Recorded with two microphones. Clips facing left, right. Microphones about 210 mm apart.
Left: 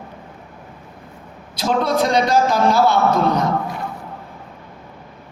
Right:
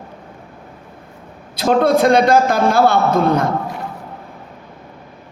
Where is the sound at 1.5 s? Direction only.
55° right (ahead or behind).